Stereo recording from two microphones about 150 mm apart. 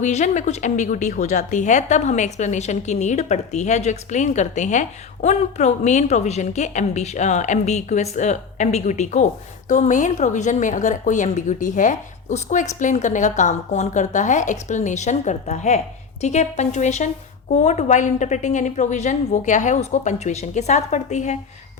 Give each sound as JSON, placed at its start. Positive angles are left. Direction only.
{"t": 0.0, "sound": "a woman's voice", "side_deg": 50}